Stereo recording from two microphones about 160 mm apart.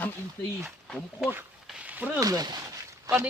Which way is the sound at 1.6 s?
10° right (ahead or behind).